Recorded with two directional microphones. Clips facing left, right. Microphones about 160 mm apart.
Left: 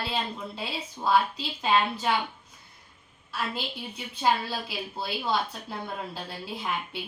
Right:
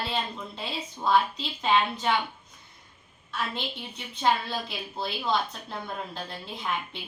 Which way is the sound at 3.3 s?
5° left (ahead or behind).